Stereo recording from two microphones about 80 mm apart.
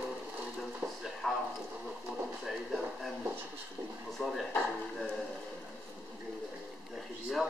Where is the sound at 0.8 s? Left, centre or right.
Right.